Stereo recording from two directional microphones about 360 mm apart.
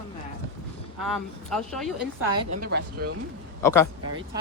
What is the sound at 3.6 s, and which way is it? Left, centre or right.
Speech, centre.